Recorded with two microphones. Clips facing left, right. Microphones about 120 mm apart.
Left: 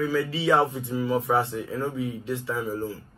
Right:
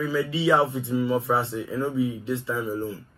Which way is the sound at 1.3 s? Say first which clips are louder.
Left 3 dB; 5° left (ahead or behind).